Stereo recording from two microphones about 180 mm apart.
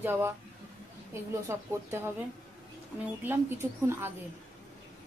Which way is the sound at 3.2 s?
10° right (ahead or behind).